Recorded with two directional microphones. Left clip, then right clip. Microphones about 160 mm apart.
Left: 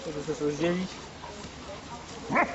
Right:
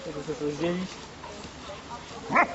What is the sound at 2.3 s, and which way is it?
Dog, centre (ahead or behind).